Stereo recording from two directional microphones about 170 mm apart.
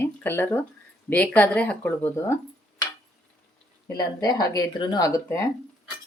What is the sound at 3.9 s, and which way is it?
Speech, 20° left (ahead or behind).